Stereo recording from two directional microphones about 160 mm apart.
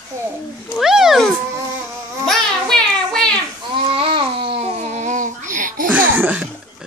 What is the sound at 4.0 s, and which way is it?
Babbling, 35° right (ahead or behind).